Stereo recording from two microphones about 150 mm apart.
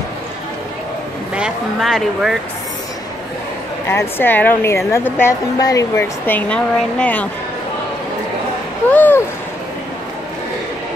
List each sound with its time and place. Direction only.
1.3 s speech: 5° right (ahead or behind)
3.9 s a woman's voice: 15° left (ahead or behind)
5.9 s a woman's voice: 10° left (ahead or behind)
8.9 s a sound: 10° left (ahead or behind)